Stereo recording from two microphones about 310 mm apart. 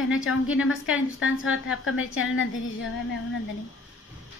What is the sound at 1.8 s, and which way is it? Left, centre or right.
Speech, left.